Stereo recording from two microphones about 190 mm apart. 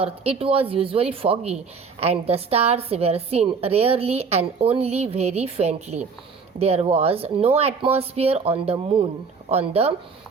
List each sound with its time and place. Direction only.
0.0 s a woman's voice: 30° right (ahead or behind)